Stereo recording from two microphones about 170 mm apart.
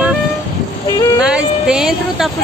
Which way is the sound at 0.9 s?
20° left (ahead or behind).